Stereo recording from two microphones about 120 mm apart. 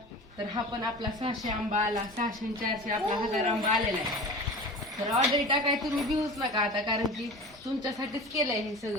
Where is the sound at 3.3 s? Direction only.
75° right (ahead or behind).